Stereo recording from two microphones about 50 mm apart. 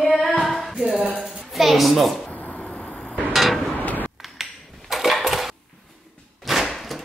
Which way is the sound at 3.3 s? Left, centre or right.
Centre.